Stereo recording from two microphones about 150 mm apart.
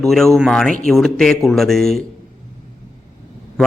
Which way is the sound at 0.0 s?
Centre (ahead or behind).